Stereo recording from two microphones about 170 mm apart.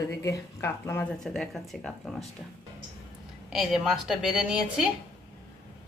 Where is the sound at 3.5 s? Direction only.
Centre (ahead or behind).